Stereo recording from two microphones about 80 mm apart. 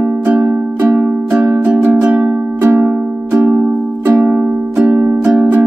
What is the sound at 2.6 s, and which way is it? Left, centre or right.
Music, right.